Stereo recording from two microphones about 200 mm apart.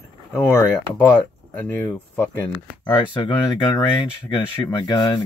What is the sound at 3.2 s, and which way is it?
Speech, 20° left (ahead or behind).